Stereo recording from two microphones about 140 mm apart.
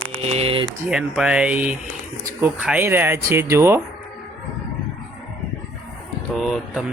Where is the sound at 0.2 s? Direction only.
45° right (ahead or behind).